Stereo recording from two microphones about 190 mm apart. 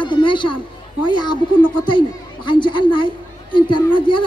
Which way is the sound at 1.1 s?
25° left (ahead or behind).